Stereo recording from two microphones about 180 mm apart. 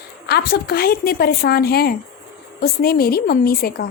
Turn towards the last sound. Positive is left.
turn(degrees=55)  # may be behind; listen again after turning